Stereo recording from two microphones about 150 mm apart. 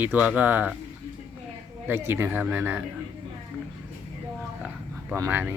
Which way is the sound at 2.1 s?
15° right (ahead or behind).